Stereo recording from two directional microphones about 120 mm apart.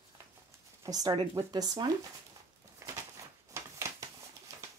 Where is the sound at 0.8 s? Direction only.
30° right (ahead or behind).